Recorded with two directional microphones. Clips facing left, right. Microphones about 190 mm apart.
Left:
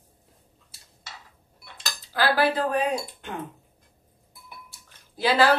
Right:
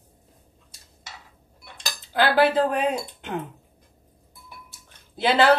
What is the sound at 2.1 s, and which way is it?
Speech, 20° right (ahead or behind).